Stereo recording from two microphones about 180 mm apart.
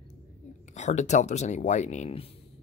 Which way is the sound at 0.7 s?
40° left (ahead or behind).